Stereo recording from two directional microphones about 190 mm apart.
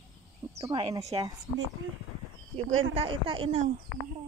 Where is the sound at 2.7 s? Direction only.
90° right.